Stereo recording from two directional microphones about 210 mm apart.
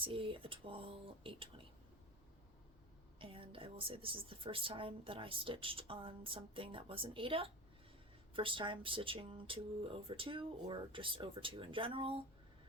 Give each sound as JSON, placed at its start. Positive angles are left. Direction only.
{"t": 0.0, "sound": "a woman's voice", "side_deg": -25}
{"t": 3.2, "sound": "a woman's voice", "side_deg": -25}